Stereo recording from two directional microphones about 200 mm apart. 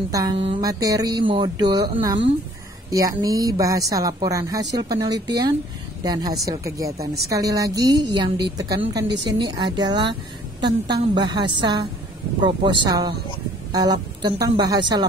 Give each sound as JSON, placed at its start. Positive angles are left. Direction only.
{"t": 0.4, "sound": "a woman's voice", "side_deg": -20}